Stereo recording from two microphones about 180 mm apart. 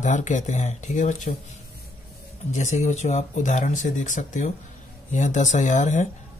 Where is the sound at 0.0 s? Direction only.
45° left (ahead or behind).